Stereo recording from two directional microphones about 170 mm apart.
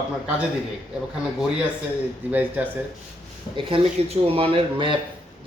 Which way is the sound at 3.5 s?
35° right (ahead or behind).